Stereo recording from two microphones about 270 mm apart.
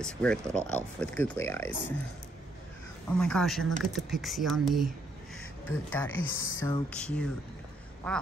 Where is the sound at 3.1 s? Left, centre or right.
Centre.